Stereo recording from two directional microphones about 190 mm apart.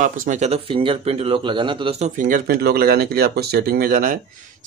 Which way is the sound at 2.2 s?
50° right (ahead or behind).